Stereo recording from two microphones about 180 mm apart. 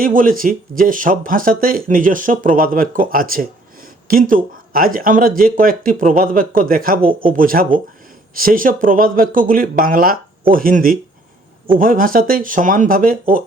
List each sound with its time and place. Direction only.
0.0 s speech: 50° right (ahead or behind)